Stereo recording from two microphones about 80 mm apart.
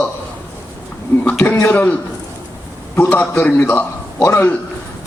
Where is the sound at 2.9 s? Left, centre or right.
Left.